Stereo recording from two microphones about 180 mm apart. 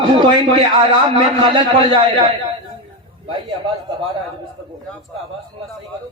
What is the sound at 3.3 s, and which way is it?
Speech, 30° right (ahead or behind).